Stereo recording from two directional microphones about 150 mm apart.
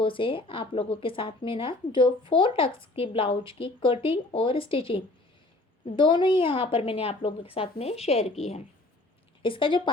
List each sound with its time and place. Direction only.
0.0 s speech: 35° left (ahead or behind)
9.4 s speech: 35° left (ahead or behind)